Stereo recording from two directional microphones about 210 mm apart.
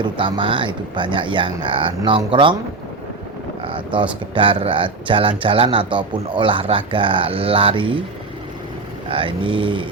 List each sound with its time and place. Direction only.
0.0 s a man's voice: 20° right (ahead or behind)
3.6 s a man's voice: 25° right (ahead or behind)
9.0 s a man's voice: 25° right (ahead or behind)